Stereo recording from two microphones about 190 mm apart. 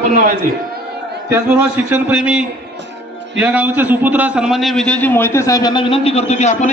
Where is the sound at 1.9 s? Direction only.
5° right (ahead or behind).